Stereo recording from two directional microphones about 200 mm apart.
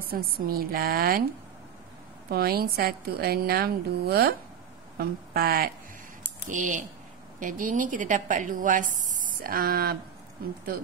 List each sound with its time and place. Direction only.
0.1 s a woman's voice: 50° right (ahead or behind)
2.3 s a woman's voice: 50° right (ahead or behind)